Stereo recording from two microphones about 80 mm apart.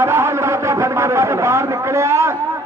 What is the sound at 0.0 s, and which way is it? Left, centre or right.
A man's voice, right.